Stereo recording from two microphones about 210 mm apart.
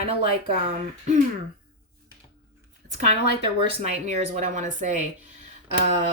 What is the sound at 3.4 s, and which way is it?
A woman's voice, 30° right (ahead or behind).